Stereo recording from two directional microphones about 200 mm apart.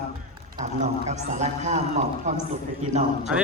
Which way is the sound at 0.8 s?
35° right (ahead or behind).